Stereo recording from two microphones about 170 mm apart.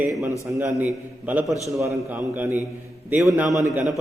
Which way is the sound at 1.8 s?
15° right (ahead or behind).